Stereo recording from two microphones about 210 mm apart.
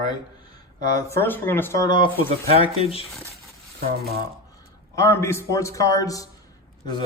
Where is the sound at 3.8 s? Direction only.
45° right (ahead or behind).